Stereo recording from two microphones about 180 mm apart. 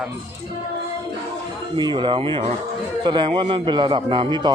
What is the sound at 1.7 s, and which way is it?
A man's voice, 25° right (ahead or behind).